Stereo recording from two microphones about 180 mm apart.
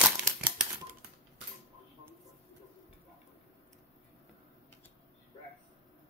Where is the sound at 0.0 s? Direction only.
10° right (ahead or behind).